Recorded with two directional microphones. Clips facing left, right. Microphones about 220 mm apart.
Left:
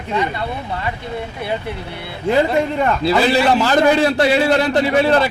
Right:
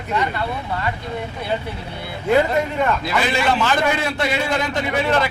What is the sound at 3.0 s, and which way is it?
A man's voice, 35° left (ahead or behind).